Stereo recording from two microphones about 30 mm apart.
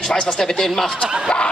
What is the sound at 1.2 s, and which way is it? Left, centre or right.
Speech, left.